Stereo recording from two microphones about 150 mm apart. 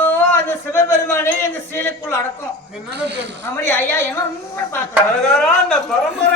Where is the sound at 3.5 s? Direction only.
15° left (ahead or behind).